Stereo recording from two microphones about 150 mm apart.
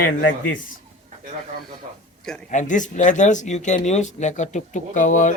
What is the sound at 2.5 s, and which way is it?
Speech, 55° left (ahead or behind).